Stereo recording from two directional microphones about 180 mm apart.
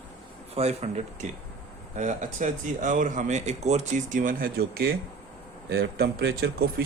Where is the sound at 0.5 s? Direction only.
35° right (ahead or behind).